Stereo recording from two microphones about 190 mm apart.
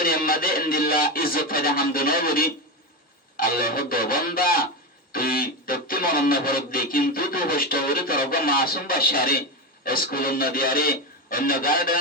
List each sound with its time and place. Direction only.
0.0 s music: 50° left (ahead or behind)